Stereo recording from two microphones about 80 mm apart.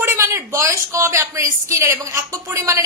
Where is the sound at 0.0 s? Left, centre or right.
Right.